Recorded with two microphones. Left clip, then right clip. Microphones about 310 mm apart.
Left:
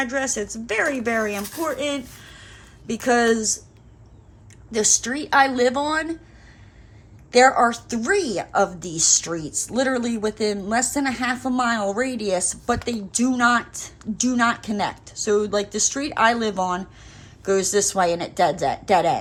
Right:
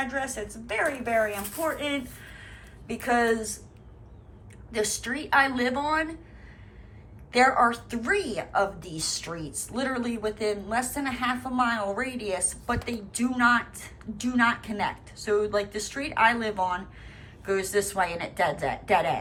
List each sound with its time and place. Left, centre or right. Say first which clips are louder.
0.0 s a woman's voice: left 6 dB; left
4.7 s a woman's voice: left 7 dB; centre
7.3 s a woman's voice: left 6 dB; centre